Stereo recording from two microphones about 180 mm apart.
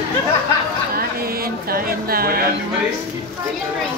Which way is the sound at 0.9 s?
55° right (ahead or behind).